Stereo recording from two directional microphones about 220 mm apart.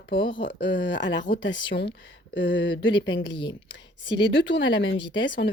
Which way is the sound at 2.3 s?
55° left (ahead or behind).